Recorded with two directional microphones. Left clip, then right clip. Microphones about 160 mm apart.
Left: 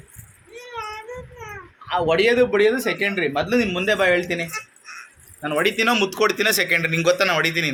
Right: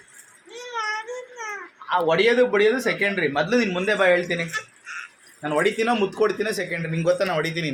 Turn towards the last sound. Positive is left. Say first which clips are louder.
# left 5 dB
turn(degrees=5)  # may be behind; listen again after turning